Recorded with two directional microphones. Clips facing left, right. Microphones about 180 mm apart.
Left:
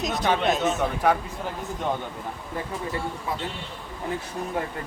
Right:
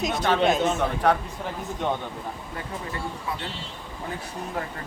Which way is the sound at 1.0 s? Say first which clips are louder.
Even; 10° left (ahead or behind).